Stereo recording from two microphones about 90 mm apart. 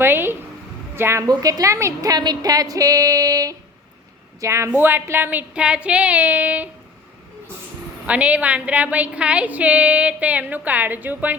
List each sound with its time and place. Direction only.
0.0 s a woman's voice: 25° right (ahead or behind)
1.3 s a woman's voice: 45° right (ahead or behind); by 6.7 s 20° right (ahead or behind)
8.0 s a woman's voice: 15° right (ahead or behind)